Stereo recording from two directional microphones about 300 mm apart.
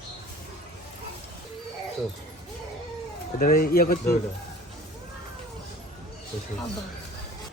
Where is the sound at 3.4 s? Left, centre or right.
Left.